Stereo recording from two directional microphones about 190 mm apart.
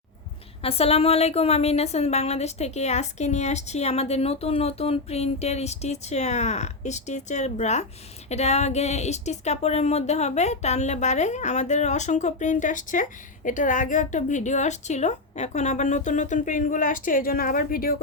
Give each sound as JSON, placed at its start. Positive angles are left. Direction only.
{"t": 0.6, "sound": "a woman's voice", "side_deg": 30}